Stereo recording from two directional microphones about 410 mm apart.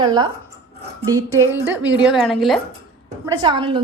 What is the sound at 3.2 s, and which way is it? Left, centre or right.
Speech, centre.